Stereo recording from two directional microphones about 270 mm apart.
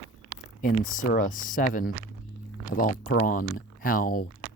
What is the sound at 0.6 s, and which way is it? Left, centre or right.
Speech, left.